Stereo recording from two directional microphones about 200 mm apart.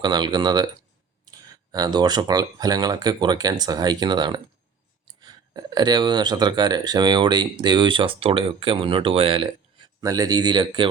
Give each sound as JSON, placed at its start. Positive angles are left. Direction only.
{"t": 0.0, "sound": "speech", "side_deg": -20}